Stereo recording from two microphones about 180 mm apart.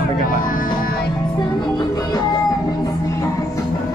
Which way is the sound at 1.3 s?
25° left (ahead or behind).